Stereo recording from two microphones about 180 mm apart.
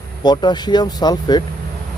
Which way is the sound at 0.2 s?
25° left (ahead or behind).